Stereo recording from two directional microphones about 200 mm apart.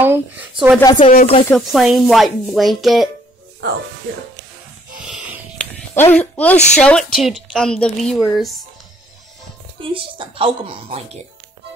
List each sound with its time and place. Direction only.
0.0 s speech: 10° right (ahead or behind)
0.7 s speech: 20° left (ahead or behind)
1.0 s speech: 30° left (ahead or behind)
1.5 s a woman's voice: centre (ahead or behind)
5.0 s a sound: 5° right (ahead or behind)
5.9 s a woman's voice: 10° left (ahead or behind)
9.9 s a woman's voice: 25° right (ahead or behind)